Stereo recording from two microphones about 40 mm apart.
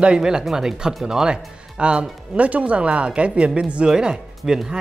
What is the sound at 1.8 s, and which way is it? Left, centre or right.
Speech, right.